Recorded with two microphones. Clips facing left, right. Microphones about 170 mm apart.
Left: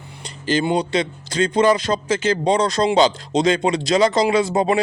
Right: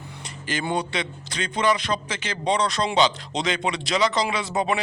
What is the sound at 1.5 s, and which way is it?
A man's voice, 45° left (ahead or behind).